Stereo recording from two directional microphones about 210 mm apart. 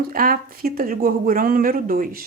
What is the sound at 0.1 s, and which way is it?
Speech, 45° right (ahead or behind).